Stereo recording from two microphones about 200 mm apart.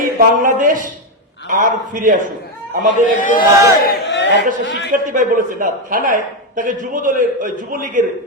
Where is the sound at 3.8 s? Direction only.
55° left (ahead or behind).